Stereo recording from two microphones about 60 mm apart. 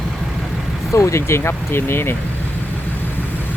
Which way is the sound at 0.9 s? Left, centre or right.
Left.